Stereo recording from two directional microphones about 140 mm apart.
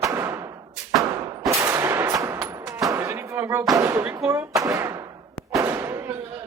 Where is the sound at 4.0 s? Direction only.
10° right (ahead or behind).